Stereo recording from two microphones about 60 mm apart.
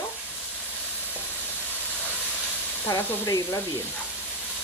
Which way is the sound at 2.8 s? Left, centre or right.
Left.